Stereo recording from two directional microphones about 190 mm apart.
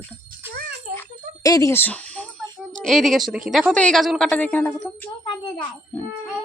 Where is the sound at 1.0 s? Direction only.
20° left (ahead or behind).